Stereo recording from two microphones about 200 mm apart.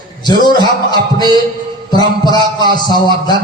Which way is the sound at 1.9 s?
20° left (ahead or behind).